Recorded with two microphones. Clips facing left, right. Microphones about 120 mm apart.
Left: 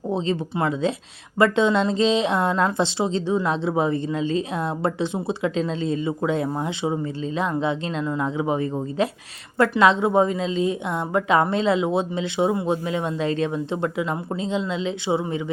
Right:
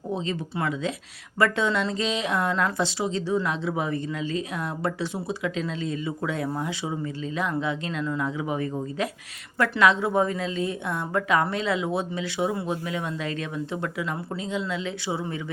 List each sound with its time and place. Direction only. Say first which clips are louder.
0.1 s a woman's voice: left 5 dB; 25° left (ahead or behind)